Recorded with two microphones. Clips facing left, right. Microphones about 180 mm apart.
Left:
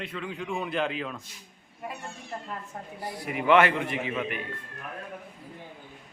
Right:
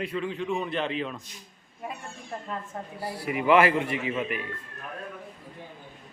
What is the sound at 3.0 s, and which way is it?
Speech, 30° right (ahead or behind).